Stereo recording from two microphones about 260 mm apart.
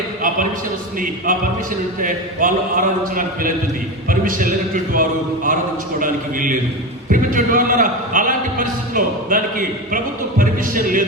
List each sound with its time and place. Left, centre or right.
0.9 s a man's voice: right